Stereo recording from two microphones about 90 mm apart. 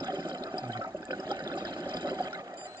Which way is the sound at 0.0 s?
50° right (ahead or behind).